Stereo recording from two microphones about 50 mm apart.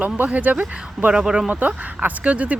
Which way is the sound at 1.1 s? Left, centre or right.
Centre.